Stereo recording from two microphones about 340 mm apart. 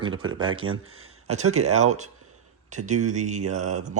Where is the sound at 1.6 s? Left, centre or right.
Centre.